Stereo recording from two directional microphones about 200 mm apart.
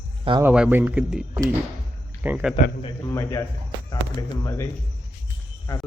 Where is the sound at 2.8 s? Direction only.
15° left (ahead or behind).